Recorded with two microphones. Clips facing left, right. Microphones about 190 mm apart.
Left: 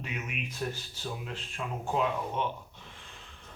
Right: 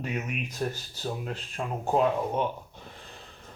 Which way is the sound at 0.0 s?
40° right (ahead or behind).